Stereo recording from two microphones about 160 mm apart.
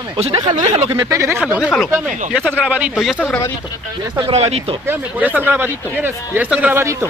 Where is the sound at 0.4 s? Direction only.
25° right (ahead or behind).